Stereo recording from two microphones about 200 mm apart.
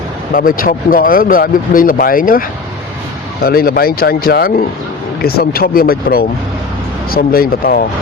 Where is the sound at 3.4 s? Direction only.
50° left (ahead or behind).